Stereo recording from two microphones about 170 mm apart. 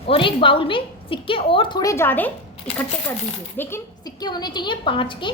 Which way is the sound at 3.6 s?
20° left (ahead or behind).